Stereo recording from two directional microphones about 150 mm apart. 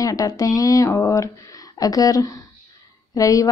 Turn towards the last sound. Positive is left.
turn(degrees=25)  # may be behind; listen again after turning